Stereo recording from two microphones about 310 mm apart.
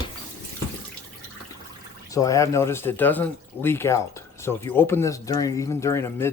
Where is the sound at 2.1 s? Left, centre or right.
Centre.